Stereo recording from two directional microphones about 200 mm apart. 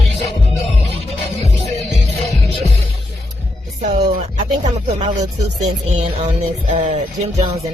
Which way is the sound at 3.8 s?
35° right (ahead or behind).